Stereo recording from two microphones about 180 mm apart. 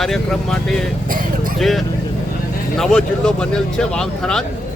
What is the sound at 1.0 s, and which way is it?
Vehicle, 50° right (ahead or behind).